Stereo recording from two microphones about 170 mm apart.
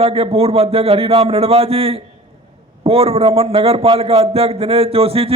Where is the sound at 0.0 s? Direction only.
35° right (ahead or behind).